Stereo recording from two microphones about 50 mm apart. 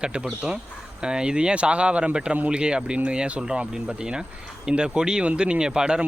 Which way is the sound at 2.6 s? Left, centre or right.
Centre.